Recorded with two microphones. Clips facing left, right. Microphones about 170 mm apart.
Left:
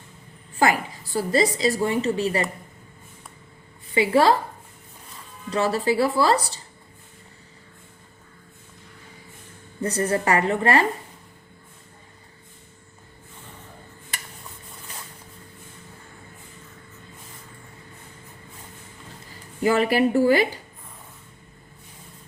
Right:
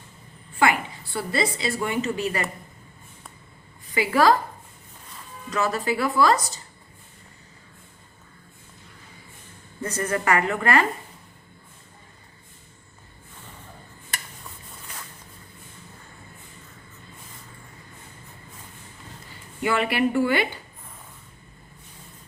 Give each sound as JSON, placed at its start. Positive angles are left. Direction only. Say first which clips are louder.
{"t": 0.6, "sound": "a woman's voice", "louder": "left 1 dB", "side_deg": 40}
{"t": 3.9, "sound": "a woman's voice", "louder": "left 1 dB", "side_deg": 30}
{"t": 5.5, "sound": "a woman's voice", "louder": "left 3 dB", "side_deg": 30}
{"t": 9.8, "sound": "a woman's voice", "louder": "left 3 dB", "side_deg": 35}
{"t": 19.3, "sound": "speech", "louder": "left 4 dB", "side_deg": 40}